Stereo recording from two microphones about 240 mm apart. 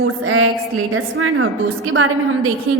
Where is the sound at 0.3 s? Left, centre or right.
Right.